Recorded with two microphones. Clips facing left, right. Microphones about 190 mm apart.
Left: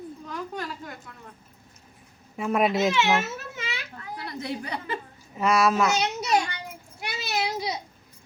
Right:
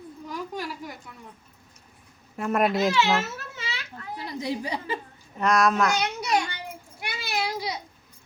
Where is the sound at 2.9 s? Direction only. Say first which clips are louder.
Even; 20° left (ahead or behind).